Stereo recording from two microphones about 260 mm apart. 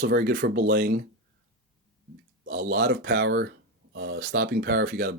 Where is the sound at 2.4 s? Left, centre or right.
Right.